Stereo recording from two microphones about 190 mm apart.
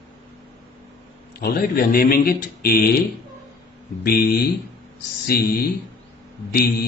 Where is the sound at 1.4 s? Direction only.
50° left (ahead or behind).